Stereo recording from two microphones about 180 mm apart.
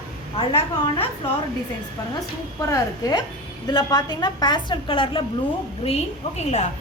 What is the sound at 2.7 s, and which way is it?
A woman's voice, 20° left (ahead or behind).